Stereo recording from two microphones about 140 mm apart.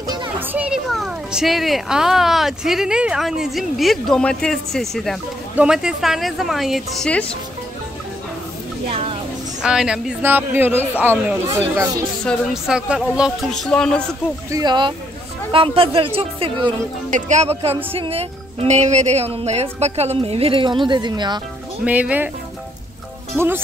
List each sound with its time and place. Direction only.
0.0 s children playing: 30° right (ahead or behind)
0.4 s children playing: 10° right (ahead or behind)
0.8 s speech: centre (ahead or behind)
8.8 s a sound: 45° right (ahead or behind)
9.6 s a man's voice: 5° right (ahead or behind); by 12.0 s 20° right (ahead or behind)
12.6 s a man's voice: 5° right (ahead or behind)
14.5 s a woman's voice: 30° right (ahead or behind)
17.1 s speech: 55° right (ahead or behind); by 21.4 s 30° right (ahead or behind)
21.8 s a man's voice: 10° right (ahead or behind)
23.3 s a man's voice: 15° right (ahead or behind)